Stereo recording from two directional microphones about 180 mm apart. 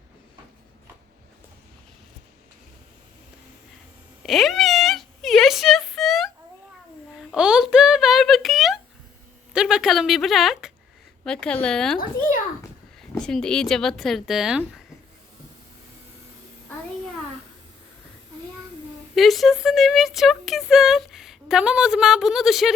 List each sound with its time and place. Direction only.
4.2 s a sound: centre (ahead or behind)
9.5 s speech: 5° right (ahead or behind)
11.9 s a child's voice: 50° left (ahead or behind)
13.0 s speech: 5° left (ahead or behind)
19.1 s speech: centre (ahead or behind)